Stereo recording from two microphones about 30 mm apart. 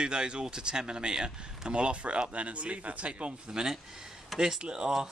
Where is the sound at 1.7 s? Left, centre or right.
Right.